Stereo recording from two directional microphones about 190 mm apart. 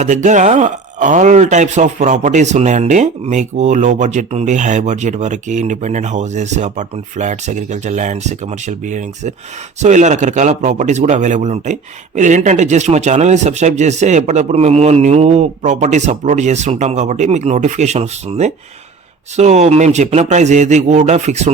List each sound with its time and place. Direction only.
0.0 s speech: 40° right (ahead or behind)